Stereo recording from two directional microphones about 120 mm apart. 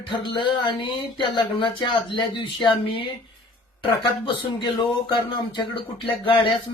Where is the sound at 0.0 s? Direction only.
45° left (ahead or behind).